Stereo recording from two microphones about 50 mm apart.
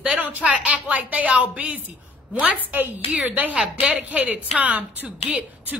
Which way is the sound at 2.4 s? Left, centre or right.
Right.